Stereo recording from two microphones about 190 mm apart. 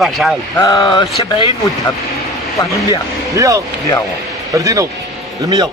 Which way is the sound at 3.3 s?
15° right (ahead or behind).